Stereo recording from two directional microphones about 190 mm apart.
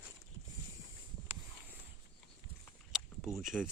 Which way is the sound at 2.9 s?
Centre (ahead or behind).